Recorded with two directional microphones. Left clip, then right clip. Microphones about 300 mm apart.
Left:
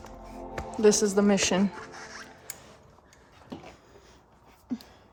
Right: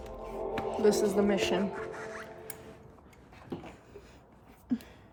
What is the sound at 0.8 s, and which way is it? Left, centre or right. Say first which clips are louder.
Speech: left 5 dB; left.